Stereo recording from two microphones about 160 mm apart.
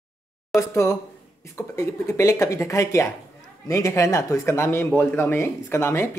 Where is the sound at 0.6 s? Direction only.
15° left (ahead or behind).